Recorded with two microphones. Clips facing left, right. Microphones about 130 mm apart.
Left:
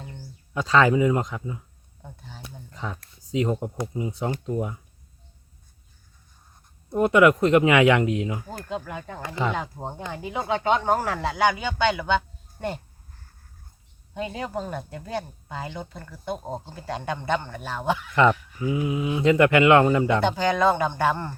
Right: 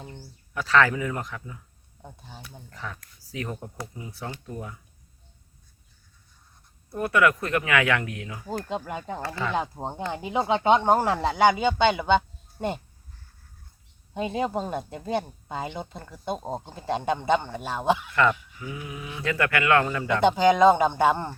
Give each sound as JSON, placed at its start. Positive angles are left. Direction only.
{"t": 0.5, "sound": "speech", "side_deg": 20}
{"t": 2.0, "sound": "speech", "side_deg": -15}
{"t": 2.4, "sound": "speech", "side_deg": 20}
{"t": 6.9, "sound": "speech", "side_deg": 20}
{"t": 8.7, "sound": "speech", "side_deg": -20}
{"t": 9.2, "sound": "speech", "side_deg": 20}
{"t": 9.6, "sound": "speech", "side_deg": -20}
{"t": 14.1, "sound": "speech", "side_deg": -20}
{"t": 18.1, "sound": "speech", "side_deg": 20}
{"t": 20.2, "sound": "speech", "side_deg": -15}